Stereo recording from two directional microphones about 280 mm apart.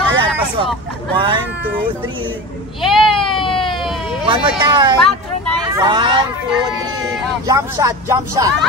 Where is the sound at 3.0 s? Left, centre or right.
Centre.